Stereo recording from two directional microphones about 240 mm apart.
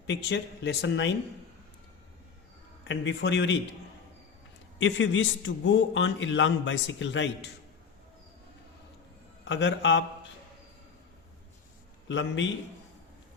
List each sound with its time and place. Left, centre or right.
0.1 s a man's voice: left
2.8 s a man's voice: left
4.8 s a man's voice: left
9.4 s a man's voice: left
12.0 s a man's voice: left